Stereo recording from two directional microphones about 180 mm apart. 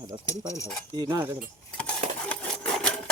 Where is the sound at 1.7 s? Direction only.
5° left (ahead or behind).